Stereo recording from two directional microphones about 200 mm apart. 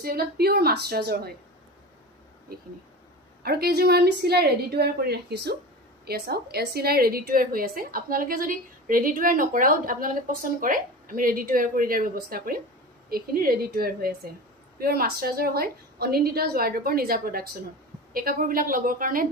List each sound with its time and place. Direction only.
0.0 s a woman's voice: 50° right (ahead or behind)
3.4 s a woman's voice: 50° right (ahead or behind)